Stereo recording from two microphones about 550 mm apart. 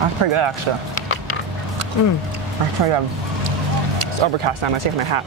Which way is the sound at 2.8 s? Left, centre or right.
Right.